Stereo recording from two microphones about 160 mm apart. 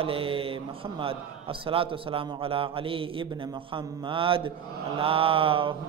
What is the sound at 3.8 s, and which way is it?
A man's voice, 35° right (ahead or behind).